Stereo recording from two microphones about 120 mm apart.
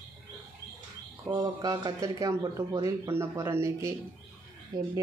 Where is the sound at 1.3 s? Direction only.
30° right (ahead or behind).